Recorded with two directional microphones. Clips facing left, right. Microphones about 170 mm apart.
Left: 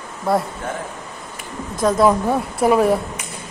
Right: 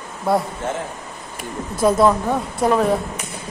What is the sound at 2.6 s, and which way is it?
Speech, 5° left (ahead or behind).